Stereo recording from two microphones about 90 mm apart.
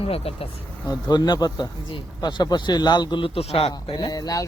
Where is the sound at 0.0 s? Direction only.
90° left.